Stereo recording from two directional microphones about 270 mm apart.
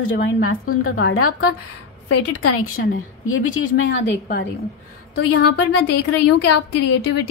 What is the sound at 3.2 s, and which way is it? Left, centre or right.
A woman's voice, left.